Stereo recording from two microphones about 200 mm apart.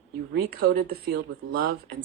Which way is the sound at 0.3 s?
60° right (ahead or behind).